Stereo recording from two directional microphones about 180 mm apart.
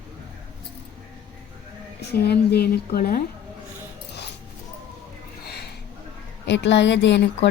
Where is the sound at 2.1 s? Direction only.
65° left (ahead or behind).